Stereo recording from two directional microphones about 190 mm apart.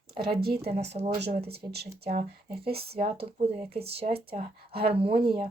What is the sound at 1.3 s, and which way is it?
Speech, 55° right (ahead or behind).